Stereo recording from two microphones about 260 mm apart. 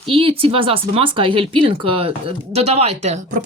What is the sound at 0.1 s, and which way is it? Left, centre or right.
A woman's voice, right.